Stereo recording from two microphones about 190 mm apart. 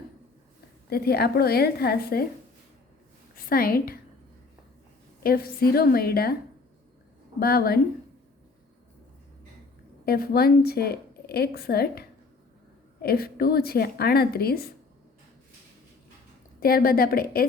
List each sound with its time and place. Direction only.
0.9 s a woman's voice: 55° left (ahead or behind)
3.3 s a woman's voice: 50° left (ahead or behind)
5.2 s a woman's voice: 50° left (ahead or behind)
7.3 s a woman's voice: 55° left (ahead or behind)
10.1 s a woman's voice: 55° left (ahead or behind)
16.6 s a woman's voice: 50° left (ahead or behind)